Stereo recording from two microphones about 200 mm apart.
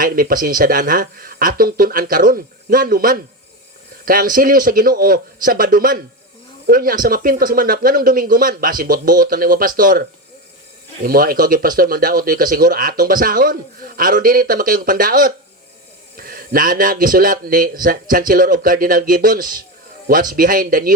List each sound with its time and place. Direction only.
0.0 s speech: 45° right (ahead or behind)